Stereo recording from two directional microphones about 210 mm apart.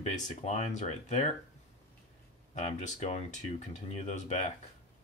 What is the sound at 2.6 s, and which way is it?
Speech, 35° left (ahead or behind).